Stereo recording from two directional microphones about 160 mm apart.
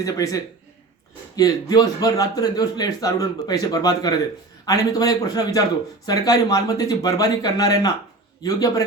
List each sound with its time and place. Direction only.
0.0 s speech: 20° left (ahead or behind)